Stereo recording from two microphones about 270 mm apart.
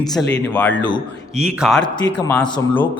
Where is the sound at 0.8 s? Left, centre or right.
Centre.